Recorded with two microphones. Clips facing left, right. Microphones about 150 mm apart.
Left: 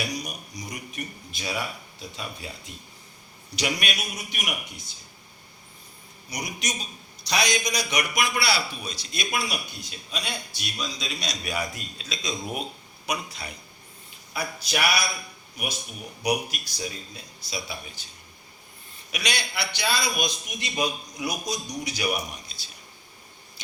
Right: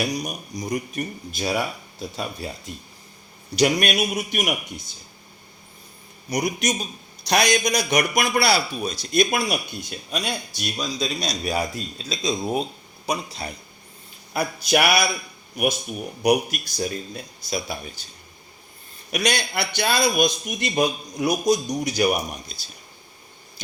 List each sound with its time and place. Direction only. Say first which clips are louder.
0.0 s a man's voice: right 6 dB; 45° right (ahead or behind)
3.5 s a man's voice: right 9 dB; 45° right (ahead or behind)
6.3 s a man's voice: right 9 dB; 50° right (ahead or behind); by 13.5 s 30° right (ahead or behind)
14.3 s a sound: right 8 dB; 55° right (ahead or behind)
15.5 s a man's voice: right 11 dB; 55° right (ahead or behind)
19.1 s a man's voice: right 7 dB; 45° right (ahead or behind)